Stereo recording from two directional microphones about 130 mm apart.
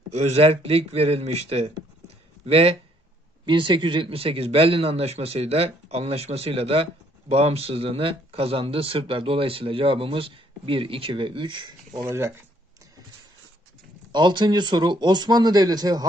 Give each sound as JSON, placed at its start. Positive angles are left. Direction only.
{"t": 0.1, "sound": "a man's voice", "side_deg": -60}
{"t": 3.4, "sound": "a man's voice", "side_deg": -40}
{"t": 12.1, "sound": "speech", "side_deg": -20}
{"t": 14.1, "sound": "speech", "side_deg": -35}